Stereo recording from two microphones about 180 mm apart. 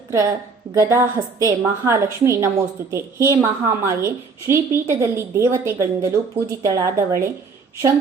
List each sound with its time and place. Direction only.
0.7 s a woman's voice: 20° right (ahead or behind)